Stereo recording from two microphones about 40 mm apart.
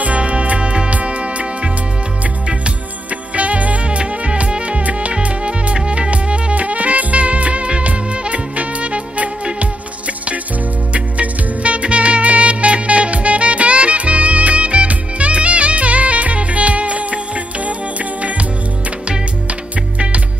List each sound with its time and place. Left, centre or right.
0.0 s music: right
3.3 s music: right
10.9 s music: right